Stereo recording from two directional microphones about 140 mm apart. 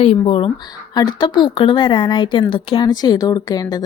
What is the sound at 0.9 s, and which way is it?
Speech, 30° left (ahead or behind).